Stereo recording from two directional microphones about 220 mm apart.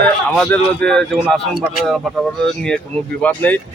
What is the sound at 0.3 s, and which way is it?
Speech, 5° left (ahead or behind).